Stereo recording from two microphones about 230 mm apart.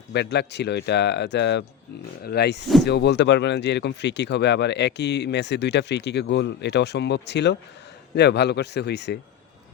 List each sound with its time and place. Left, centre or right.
0.1 s speech: left